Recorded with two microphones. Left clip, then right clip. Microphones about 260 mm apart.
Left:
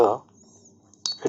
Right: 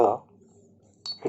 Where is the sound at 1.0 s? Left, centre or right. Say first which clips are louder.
Left 6 dB; left.